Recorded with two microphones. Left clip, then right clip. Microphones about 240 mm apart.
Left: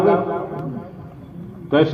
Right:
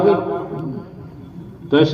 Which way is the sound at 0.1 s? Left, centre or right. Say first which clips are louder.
Even; right.